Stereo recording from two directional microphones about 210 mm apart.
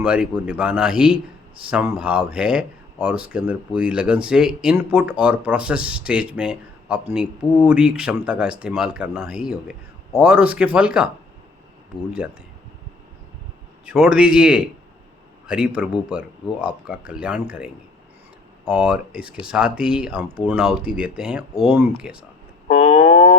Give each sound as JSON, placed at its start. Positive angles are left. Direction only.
{"t": 0.0, "sound": "speech", "side_deg": -5}
{"t": 13.8, "sound": "speech", "side_deg": -5}
{"t": 18.7, "sound": "speech", "side_deg": -5}
{"t": 22.7, "sound": "a sound", "side_deg": 30}